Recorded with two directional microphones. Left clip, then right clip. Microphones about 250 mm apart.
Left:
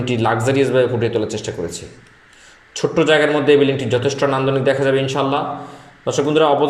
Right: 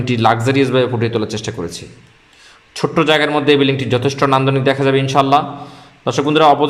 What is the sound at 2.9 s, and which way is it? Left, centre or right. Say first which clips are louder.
A man's voice: right 1 dB; centre.